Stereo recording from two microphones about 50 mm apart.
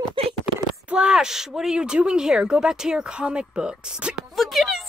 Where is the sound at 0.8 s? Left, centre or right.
Centre.